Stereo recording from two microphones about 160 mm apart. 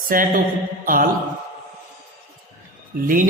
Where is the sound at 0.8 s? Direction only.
60° right (ahead or behind).